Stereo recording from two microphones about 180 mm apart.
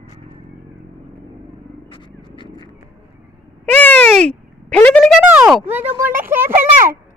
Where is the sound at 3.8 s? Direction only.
10° left (ahead or behind); by 6.5 s 10° right (ahead or behind).